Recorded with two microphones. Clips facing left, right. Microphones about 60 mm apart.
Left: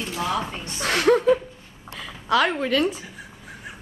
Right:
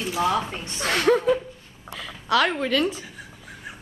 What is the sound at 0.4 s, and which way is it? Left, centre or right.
A woman's voice, centre.